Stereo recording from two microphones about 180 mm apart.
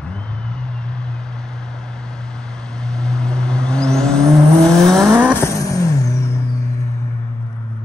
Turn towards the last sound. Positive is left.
turn(degrees=15)  # may be behind; listen again after turning